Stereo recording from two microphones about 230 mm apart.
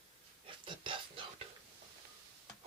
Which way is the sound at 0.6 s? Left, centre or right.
Right.